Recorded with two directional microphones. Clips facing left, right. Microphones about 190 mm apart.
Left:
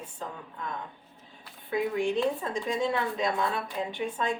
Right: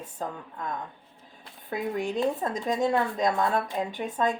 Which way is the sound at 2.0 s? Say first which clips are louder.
Right 2 dB; 45° right (ahead or behind).